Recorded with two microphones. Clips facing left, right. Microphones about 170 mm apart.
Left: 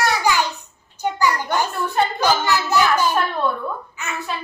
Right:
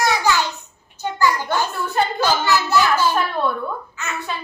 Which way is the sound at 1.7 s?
Centre (ahead or behind).